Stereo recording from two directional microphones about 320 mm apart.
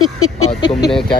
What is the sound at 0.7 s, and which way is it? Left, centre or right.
Speech, centre.